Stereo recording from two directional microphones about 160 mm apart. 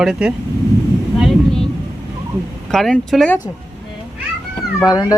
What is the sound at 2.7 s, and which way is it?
Speech, centre (ahead or behind).